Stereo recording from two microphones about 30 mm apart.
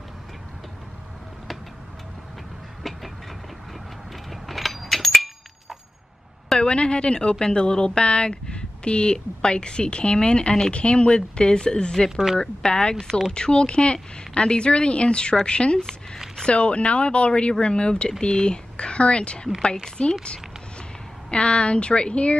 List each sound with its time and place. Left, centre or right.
4.3 s a sound: centre
6.6 s a woman's voice: left
21.3 s a woman's voice: left